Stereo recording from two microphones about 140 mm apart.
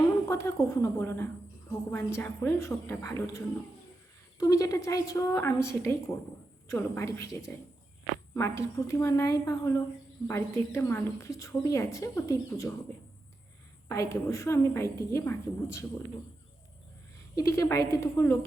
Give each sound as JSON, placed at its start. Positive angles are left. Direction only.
{"t": 0.3, "sound": "a woman's voice", "side_deg": 20}
{"t": 8.3, "sound": "a woman's voice", "side_deg": 15}
{"t": 13.8, "sound": "a woman's voice", "side_deg": 20}
{"t": 17.3, "sound": "a woman's voice", "side_deg": 25}